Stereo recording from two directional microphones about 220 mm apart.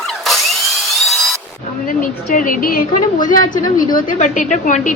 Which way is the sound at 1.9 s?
40° left (ahead or behind).